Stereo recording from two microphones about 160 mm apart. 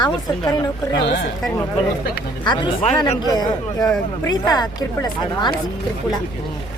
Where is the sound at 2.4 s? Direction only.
30° left (ahead or behind).